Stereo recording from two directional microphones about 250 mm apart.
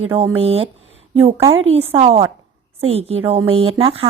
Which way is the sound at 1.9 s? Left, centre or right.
Right.